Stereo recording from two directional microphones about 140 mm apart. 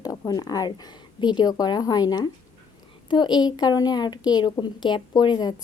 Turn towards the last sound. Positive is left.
turn(degrees=30)  # may be behind; listen again after turning